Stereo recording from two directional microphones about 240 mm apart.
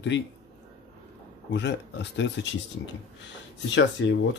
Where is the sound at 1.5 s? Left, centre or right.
Left.